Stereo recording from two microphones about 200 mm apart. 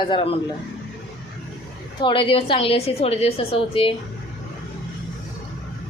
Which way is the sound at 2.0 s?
25° left (ahead or behind).